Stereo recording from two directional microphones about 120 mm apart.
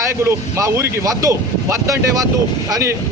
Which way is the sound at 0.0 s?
20° right (ahead or behind).